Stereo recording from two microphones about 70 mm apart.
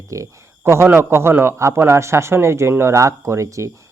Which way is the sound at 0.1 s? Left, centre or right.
Right.